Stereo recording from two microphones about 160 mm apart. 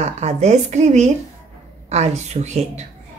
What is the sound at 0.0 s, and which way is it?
A woman's voice, 45° right (ahead or behind).